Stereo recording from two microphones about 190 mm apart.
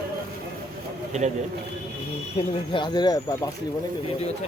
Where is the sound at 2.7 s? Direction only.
20° left (ahead or behind).